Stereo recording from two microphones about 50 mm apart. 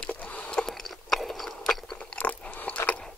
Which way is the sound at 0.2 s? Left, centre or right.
Left.